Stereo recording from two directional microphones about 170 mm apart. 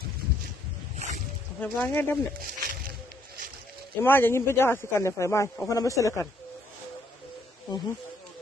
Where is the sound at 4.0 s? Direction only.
15° left (ahead or behind).